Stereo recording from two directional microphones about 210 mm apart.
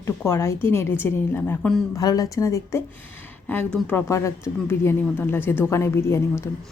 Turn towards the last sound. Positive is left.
turn(degrees=10)  # may be behind; listen again after turning